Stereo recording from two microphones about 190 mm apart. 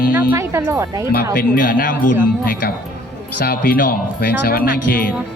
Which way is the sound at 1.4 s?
45° left (ahead or behind).